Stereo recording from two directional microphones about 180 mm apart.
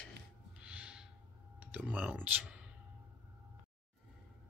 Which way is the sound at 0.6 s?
5° right (ahead or behind).